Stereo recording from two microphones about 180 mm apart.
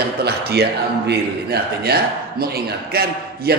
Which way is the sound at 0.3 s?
65° right (ahead or behind).